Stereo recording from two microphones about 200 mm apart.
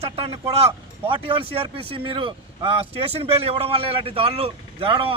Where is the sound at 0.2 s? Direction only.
30° right (ahead or behind).